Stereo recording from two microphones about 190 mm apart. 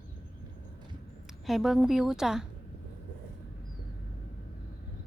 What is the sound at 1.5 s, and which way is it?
Speech, centre (ahead or behind).